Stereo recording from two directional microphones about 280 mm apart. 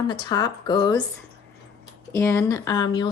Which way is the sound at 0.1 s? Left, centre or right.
Centre.